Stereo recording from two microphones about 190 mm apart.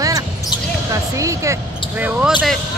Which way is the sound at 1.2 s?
15° right (ahead or behind).